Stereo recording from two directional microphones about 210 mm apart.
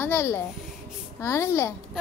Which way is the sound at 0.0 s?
10° left (ahead or behind).